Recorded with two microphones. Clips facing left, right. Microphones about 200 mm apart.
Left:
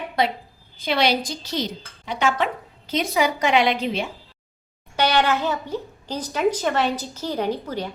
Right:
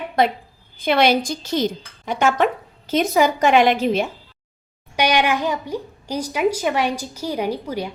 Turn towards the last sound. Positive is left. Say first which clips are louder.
# right 1 dB
turn(degrees=-10)  # may be behind; listen again after turning